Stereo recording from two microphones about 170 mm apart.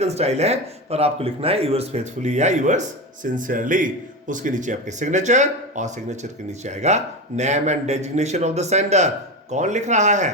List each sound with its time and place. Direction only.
0.0 s speech: 40° right (ahead or behind)